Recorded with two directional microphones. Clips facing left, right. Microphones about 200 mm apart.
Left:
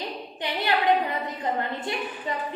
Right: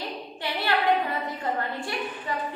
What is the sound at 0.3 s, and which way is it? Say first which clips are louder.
A woman's voice: left 1 dB; 15° left (ahead or behind).